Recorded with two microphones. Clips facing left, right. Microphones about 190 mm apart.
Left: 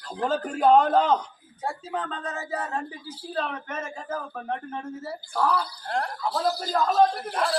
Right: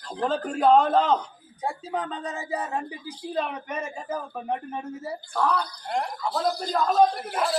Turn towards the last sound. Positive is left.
turn(degrees=0)  # may be behind; listen again after turning